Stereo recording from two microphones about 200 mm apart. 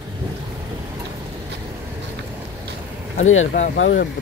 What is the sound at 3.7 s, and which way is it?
Speech, 65° left (ahead or behind).